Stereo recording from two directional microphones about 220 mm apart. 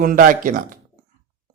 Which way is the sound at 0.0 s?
40° right (ahead or behind).